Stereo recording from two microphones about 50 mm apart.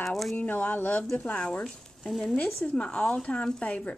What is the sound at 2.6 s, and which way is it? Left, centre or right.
Speech, centre.